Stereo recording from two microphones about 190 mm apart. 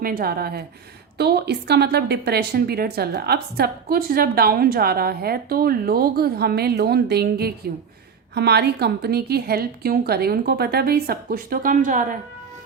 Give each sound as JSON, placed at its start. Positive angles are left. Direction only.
{"t": 0.0, "sound": "a woman's voice", "side_deg": -50}